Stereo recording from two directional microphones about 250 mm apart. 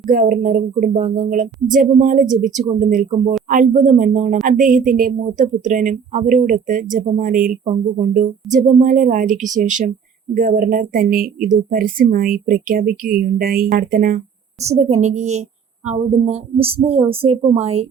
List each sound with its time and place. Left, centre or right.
0.1 s speech: right